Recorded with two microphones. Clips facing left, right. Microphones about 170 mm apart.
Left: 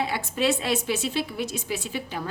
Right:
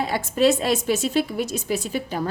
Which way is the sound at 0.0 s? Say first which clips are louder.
Right 6 dB; 40° right (ahead or behind).